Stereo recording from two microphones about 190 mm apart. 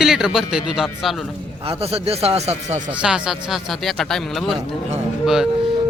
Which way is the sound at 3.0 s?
5° right (ahead or behind).